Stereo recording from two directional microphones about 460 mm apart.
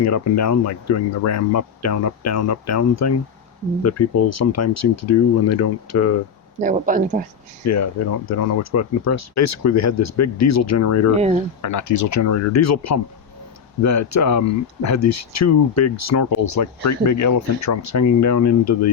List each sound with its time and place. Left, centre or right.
0.0 s speech: left
6.6 s speech: centre
7.6 s speech: left
11.1 s speech: centre
11.6 s speech: left